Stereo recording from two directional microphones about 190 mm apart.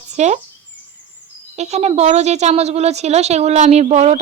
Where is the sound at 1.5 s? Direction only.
35° right (ahead or behind).